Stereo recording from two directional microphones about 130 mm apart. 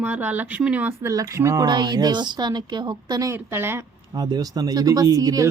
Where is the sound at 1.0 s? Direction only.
25° right (ahead or behind).